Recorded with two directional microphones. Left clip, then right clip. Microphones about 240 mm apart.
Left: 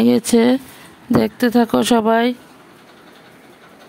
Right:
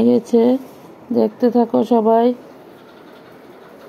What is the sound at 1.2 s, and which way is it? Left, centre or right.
Speech, left.